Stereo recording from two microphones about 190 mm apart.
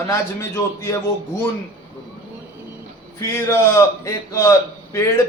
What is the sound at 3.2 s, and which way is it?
A man's voice, 15° left (ahead or behind).